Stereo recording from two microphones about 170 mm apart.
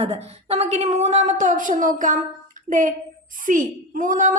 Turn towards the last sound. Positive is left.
turn(degrees=-50)  # may be behind; listen again after turning